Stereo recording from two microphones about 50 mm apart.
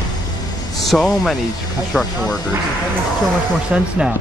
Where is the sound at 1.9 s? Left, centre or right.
Centre.